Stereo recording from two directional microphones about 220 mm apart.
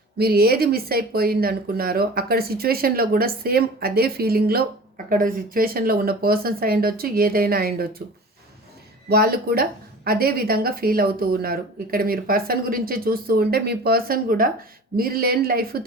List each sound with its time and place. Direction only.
0.2 s speech: 45° right (ahead or behind)
9.0 s speech: 45° right (ahead or behind)